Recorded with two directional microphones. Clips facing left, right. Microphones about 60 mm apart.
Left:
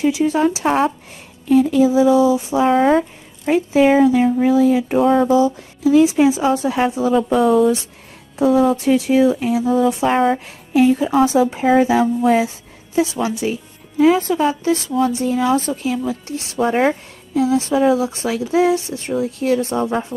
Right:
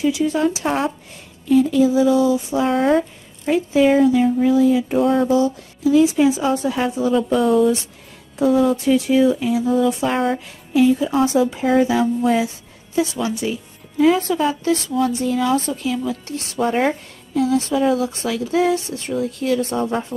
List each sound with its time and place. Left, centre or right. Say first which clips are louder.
0.0 s speech: left 2 dB; left
2.7 s a woman's voice: left 3 dB; centre
3.4 s speech: left 2 dB; left
5.0 s speech: left 4 dB; centre
7.4 s a woman's voice: left 2 dB; centre
10.1 s a woman's voice: left 4 dB; centre
10.4 s speech: left 1 dB; left
16.5 s a woman's voice: left 2 dB; centre
17.4 s speech: left 2 dB; left
19.4 s speech: left 2 dB; left
19.7 s a woman's voice: left 2 dB; centre